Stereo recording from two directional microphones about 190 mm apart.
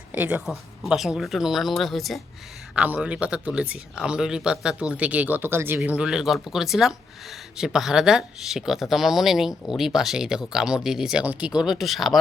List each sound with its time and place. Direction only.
0.1 s speech: 10° right (ahead or behind)